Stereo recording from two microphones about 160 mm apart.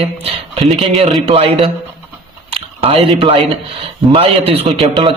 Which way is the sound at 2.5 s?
35° right (ahead or behind).